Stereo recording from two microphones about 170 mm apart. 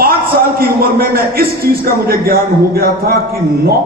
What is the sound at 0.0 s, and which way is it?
A man's voice, 60° right (ahead or behind).